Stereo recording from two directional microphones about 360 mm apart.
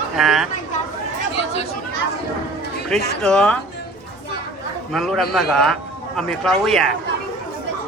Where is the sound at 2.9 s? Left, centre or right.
Centre.